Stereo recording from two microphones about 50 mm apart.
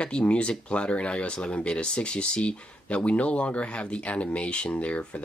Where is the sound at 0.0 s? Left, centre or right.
Left.